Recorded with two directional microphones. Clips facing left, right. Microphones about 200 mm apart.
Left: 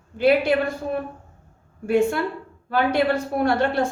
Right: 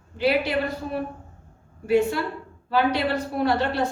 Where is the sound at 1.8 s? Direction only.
50° left (ahead or behind).